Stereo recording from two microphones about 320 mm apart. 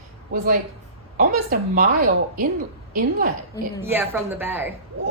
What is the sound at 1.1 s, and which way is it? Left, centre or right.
A woman's voice, right.